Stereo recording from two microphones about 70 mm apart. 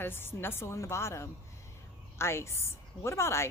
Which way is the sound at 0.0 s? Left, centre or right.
Left.